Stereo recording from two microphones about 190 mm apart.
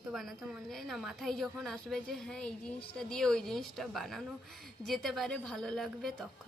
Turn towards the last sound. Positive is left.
turn(degrees=0)  # may be behind; listen again after turning